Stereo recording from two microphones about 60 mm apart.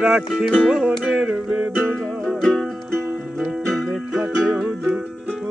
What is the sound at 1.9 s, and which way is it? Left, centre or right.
Music, centre.